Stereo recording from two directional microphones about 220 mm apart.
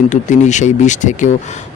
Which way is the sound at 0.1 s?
35° left (ahead or behind).